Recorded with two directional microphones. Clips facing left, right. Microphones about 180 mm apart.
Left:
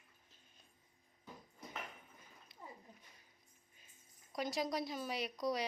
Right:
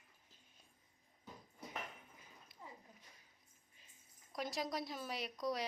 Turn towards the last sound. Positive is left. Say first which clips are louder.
# left 3 dB
turn(degrees=0)  # may be behind; listen again after turning